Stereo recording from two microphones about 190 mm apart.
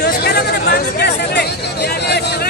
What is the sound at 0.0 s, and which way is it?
Chatter, 55° left (ahead or behind).